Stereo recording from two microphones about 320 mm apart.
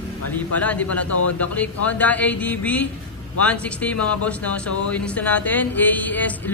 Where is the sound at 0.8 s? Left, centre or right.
Left.